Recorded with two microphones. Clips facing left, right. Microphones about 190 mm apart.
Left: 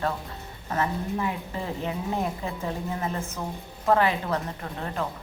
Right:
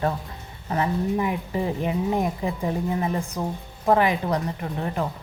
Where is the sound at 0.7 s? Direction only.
15° right (ahead or behind).